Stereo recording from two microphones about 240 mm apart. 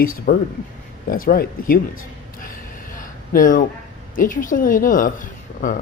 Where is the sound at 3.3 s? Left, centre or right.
Left.